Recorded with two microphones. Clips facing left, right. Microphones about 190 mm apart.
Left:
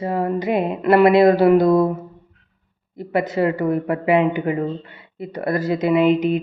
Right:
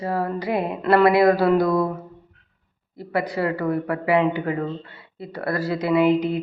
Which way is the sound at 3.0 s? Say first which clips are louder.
Left 4 dB; 20° left (ahead or behind).